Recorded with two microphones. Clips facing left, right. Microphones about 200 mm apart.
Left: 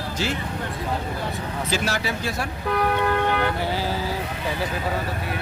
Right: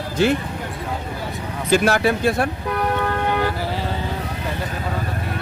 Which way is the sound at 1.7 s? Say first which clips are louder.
Right 10 dB; 55° right (ahead or behind).